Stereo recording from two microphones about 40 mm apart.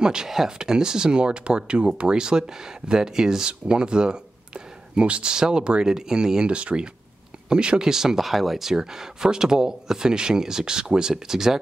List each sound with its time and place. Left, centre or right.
0.0 s speech: centre
0.3 s speech: centre; by 7.9 s right
7.9 s speech: centre
8.7 s speech: centre